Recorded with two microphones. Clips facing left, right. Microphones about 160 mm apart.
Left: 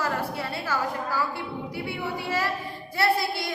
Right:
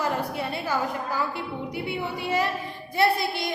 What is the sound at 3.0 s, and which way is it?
Speech, 20° right (ahead or behind).